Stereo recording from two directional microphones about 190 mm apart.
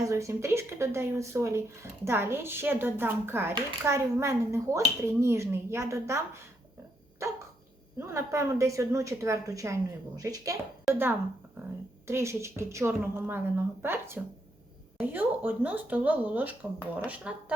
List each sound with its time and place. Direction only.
0.0 s speech: 15° right (ahead or behind)
7.2 s dog: 15° right (ahead or behind)
7.9 s speech: 15° right (ahead or behind)